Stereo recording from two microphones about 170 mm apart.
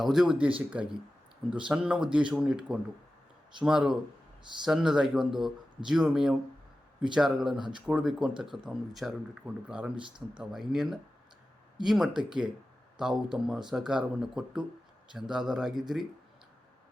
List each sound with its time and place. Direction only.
0.0 s speech: 5° right (ahead or behind)